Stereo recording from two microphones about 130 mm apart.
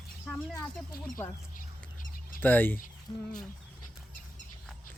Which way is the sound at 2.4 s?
15° left (ahead or behind).